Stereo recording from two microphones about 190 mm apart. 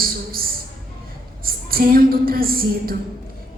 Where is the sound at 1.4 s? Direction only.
50° right (ahead or behind).